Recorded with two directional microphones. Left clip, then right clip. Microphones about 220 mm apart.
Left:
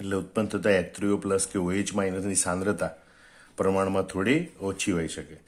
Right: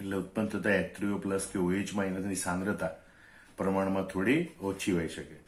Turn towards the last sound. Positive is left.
turn(degrees=50)  # may be behind; listen again after turning